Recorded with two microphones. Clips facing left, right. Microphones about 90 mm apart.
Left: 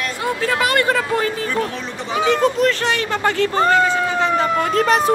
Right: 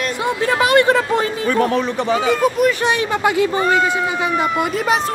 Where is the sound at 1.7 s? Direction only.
60° right (ahead or behind).